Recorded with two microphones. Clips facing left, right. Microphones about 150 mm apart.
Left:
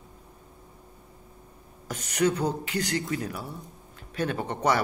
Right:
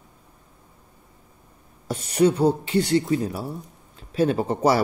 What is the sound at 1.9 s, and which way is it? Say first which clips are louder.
A man's voice: right 6 dB; 25° right (ahead or behind).